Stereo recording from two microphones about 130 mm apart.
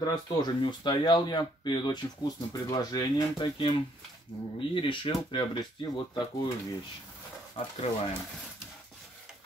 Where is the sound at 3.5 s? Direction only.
40° left (ahead or behind).